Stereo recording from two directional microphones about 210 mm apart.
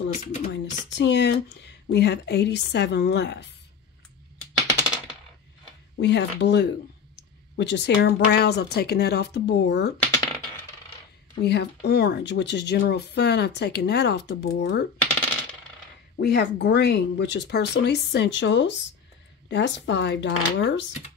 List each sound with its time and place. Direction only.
0.1 s speech: 35° left (ahead or behind)
0.5 s speech: 55° left (ahead or behind)
5.9 s speech: 55° left (ahead or behind)
10.1 s a sound: 15° left (ahead or behind)
11.3 s speech: 50° left (ahead or behind)
16.2 s speech: 50° left (ahead or behind)